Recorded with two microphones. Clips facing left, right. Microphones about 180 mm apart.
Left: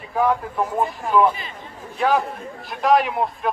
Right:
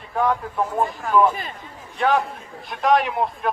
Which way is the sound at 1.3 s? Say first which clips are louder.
Right 3 dB; 50° right (ahead or behind).